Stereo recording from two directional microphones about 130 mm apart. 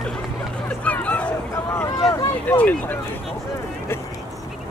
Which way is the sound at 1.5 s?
20° left (ahead or behind).